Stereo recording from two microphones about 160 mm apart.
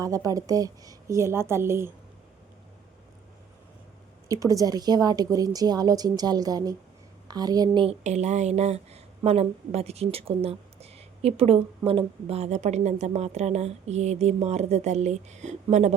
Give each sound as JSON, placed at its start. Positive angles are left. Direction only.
{"t": 0.0, "sound": "a woman's voice", "side_deg": -20}
{"t": 4.3, "sound": "a woman's voice", "side_deg": -20}
{"t": 8.0, "sound": "a woman's voice", "side_deg": -45}